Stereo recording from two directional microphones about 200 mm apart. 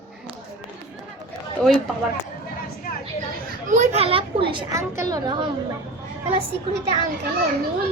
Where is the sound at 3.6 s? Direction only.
40° right (ahead or behind); by 5.4 s 20° right (ahead or behind).